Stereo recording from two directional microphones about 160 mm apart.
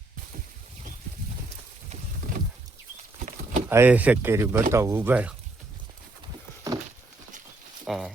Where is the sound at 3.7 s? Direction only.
10° right (ahead or behind).